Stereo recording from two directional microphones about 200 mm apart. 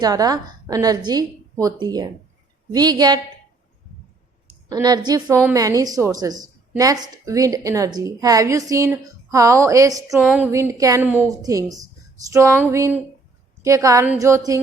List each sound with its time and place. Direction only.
0.0 s a woman's voice: 20° right (ahead or behind)
4.4 s a woman's voice: 20° right (ahead or behind)